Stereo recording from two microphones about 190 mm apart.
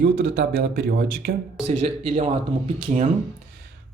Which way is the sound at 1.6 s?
35° right (ahead or behind).